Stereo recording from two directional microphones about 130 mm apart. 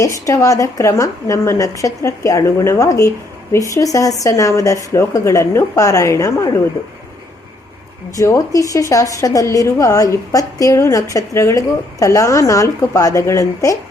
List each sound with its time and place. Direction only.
0.0 s speech: 25° left (ahead or behind)
8.1 s speech: 25° left (ahead or behind)